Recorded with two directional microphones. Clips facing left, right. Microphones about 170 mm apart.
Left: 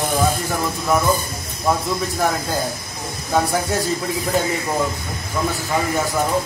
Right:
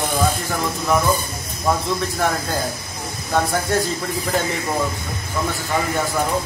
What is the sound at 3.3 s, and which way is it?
Speech, 5° left (ahead or behind).